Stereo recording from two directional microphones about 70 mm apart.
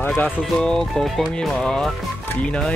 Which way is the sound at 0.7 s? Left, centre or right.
Centre.